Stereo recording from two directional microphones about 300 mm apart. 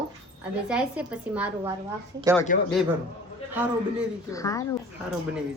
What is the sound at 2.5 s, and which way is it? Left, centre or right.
Speech, left.